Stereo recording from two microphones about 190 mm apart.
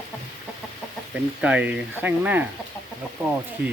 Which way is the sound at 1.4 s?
5° right (ahead or behind).